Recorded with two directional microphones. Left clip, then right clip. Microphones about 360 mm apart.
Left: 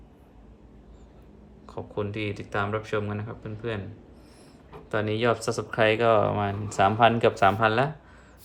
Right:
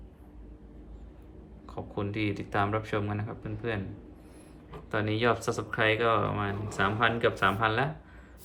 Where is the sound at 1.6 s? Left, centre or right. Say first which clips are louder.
Left 4 dB; centre.